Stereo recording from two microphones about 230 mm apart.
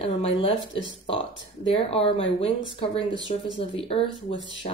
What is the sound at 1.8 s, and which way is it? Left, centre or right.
Speech, left.